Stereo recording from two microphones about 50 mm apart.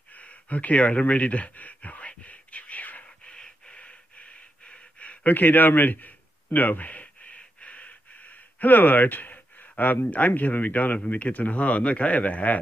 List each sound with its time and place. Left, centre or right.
0.1 s a sound: left
3.3 s gasp: centre; by 9.9 s left
10.1 s speech: left